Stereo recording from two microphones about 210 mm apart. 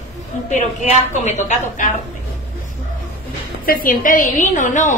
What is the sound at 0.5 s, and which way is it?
A woman's voice, 35° left (ahead or behind).